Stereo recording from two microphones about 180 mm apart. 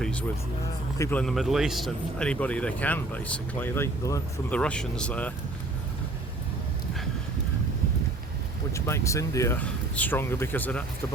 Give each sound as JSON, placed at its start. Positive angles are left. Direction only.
{"t": 0.0, "sound": "vehicle", "side_deg": 5}
{"t": 0.9, "sound": "a man's voice", "side_deg": 15}
{"t": 1.2, "sound": "a man's voice", "side_deg": 0}
{"t": 8.7, "sound": "a man's voice", "side_deg": 15}